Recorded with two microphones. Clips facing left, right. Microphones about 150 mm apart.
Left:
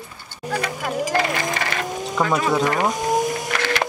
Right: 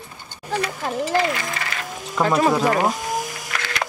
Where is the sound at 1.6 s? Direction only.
60° left (ahead or behind).